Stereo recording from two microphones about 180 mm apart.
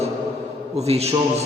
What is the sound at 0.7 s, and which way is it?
Speech, 35° right (ahead or behind).